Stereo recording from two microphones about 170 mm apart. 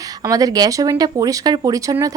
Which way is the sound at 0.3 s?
20° right (ahead or behind).